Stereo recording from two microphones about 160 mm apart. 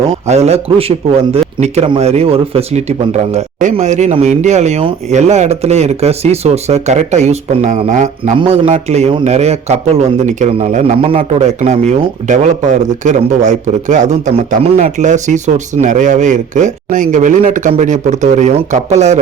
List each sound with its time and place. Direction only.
0.3 s speech: 40° right (ahead or behind)
10.9 s speech: 35° right (ahead or behind)